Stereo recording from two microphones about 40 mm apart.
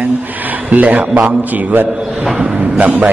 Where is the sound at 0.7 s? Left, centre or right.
Right.